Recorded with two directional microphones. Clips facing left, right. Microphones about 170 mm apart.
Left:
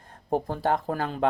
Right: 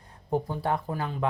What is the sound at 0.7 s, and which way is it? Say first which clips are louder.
Speech: left 3 dB; 45° left (ahead or behind).